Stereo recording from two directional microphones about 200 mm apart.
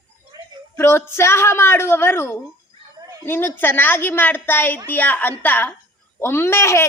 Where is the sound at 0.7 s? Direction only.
15° left (ahead or behind).